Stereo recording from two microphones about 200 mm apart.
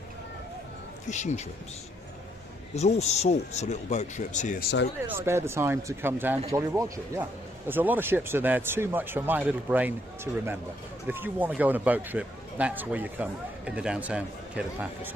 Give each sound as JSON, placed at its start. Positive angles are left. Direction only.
{"t": 1.1, "sound": "speech", "side_deg": 35}
{"t": 2.7, "sound": "speech", "side_deg": 35}
{"t": 5.0, "sound": "a man's voice", "side_deg": -10}